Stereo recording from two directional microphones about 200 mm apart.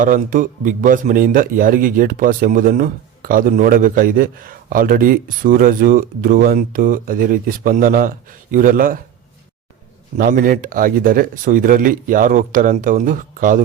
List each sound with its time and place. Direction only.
0.0 s a man's voice: 40° right (ahead or behind)
10.2 s a man's voice: 45° right (ahead or behind)